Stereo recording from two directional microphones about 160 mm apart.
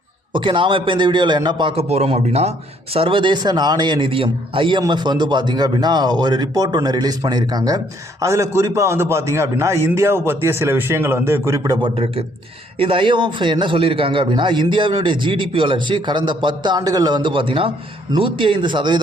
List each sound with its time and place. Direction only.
0.3 s a man's voice: 30° right (ahead or behind)